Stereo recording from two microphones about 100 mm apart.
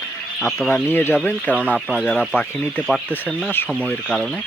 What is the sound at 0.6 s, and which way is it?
Speech, 20° left (ahead or behind).